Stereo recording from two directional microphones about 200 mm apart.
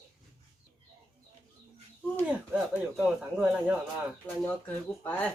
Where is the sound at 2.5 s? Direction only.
5° right (ahead or behind).